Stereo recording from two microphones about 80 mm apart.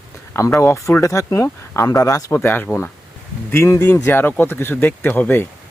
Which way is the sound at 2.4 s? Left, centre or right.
Left.